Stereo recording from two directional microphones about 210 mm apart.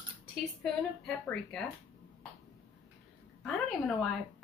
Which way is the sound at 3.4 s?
Centre (ahead or behind).